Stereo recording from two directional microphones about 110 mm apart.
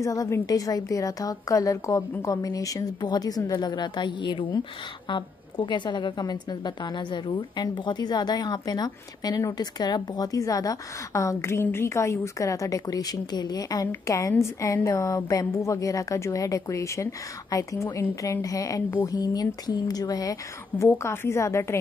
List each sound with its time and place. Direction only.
0.0 s a woman's voice: 30° left (ahead or behind)